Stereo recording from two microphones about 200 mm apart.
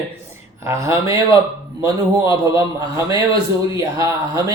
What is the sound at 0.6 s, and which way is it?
Speech, 15° right (ahead or behind).